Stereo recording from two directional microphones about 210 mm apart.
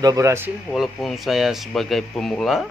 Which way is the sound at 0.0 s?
15° right (ahead or behind).